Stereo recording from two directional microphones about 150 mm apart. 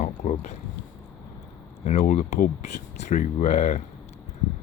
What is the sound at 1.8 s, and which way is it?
Speech, 50° left (ahead or behind).